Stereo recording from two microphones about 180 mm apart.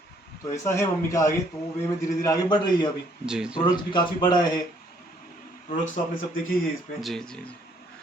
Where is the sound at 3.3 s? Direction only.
5° right (ahead or behind).